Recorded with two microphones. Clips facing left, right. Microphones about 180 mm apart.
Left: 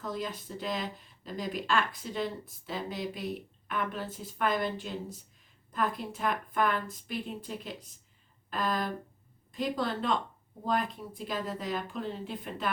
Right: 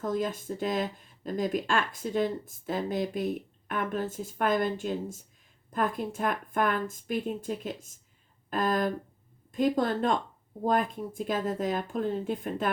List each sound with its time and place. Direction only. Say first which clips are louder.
0.0 s speech: right 6 dB; 50° right (ahead or behind)